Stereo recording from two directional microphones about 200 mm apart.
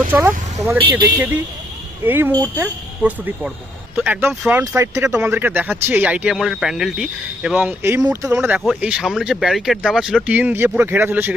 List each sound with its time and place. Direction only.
0.1 s speech: 10° right (ahead or behind)
0.9 s a man's voice: 20° right (ahead or behind)
2.0 s speech: 10° right (ahead or behind)